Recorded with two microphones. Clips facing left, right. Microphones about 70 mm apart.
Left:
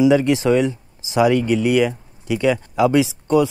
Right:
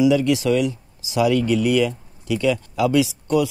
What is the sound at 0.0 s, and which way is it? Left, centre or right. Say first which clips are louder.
Speech: left 2 dB; left.